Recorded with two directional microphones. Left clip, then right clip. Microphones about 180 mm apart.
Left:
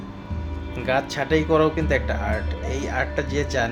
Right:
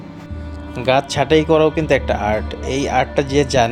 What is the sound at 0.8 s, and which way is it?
Speech, 35° right (ahead or behind).